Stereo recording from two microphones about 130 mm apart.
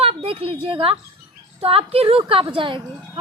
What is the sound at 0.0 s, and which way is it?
A woman's voice, 45° right (ahead or behind).